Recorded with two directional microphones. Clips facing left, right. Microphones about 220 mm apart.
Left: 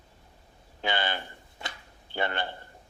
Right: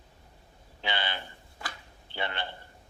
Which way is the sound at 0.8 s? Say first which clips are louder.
Left 4 dB; 45° left (ahead or behind).